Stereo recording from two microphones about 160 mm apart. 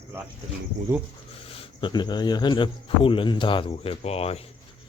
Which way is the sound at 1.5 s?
35° left (ahead or behind).